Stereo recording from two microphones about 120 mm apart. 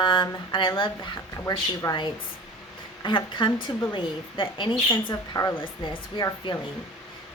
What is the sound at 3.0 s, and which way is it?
A woman's voice, 40° left (ahead or behind).